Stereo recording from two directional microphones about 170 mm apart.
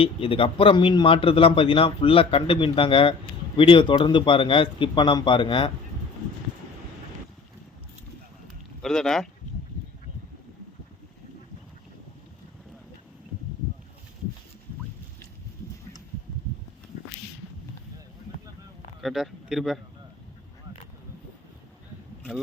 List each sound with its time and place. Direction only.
0.0 s a man's voice: 35° left (ahead or behind)
8.8 s speech: 5° left (ahead or behind)
19.0 s a man's voice: centre (ahead or behind)